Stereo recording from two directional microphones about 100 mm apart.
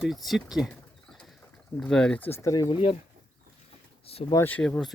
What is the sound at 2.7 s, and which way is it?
Speech, 70° left (ahead or behind).